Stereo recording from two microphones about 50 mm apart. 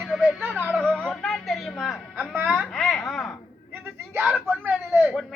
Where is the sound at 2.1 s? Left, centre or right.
Right.